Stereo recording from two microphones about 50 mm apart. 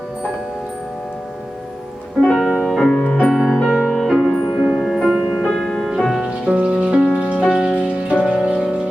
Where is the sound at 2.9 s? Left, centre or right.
Left.